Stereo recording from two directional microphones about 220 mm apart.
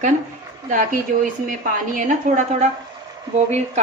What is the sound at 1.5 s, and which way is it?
Speech, 35° right (ahead or behind).